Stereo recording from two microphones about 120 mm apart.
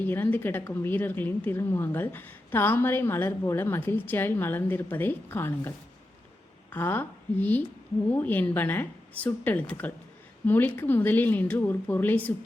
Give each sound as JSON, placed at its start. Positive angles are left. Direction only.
{"t": 0.0, "sound": "a woman's voice", "side_deg": 15}
{"t": 6.7, "sound": "a woman's voice", "side_deg": 15}